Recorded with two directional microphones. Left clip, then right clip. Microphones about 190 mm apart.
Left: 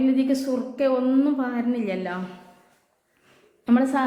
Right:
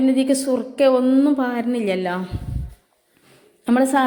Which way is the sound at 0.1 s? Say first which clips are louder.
Right 4 dB; 25° right (ahead or behind).